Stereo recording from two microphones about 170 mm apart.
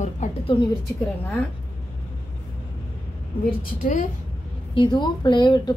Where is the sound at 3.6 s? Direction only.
50° left (ahead or behind).